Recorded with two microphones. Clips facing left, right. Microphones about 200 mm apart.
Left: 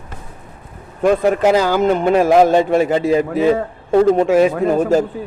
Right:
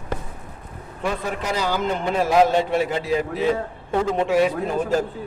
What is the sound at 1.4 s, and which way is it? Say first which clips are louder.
Speech: left 12 dB; 75° left (ahead or behind).